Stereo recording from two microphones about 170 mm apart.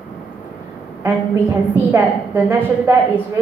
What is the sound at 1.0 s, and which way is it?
A woman's voice, 15° right (ahead or behind).